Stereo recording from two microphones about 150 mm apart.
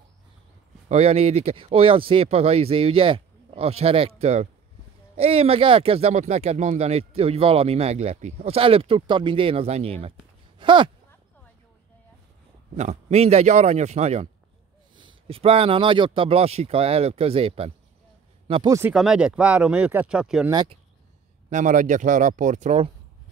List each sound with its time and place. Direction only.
0.8 s speech: 45° right (ahead or behind)
12.7 s a man's voice: 45° right (ahead or behind)
15.0 s speech: 35° right (ahead or behind)
18.7 s speech: 15° right (ahead or behind)
18.9 s speech: 5° right (ahead or behind)
21.5 s speech: 55° right (ahead or behind)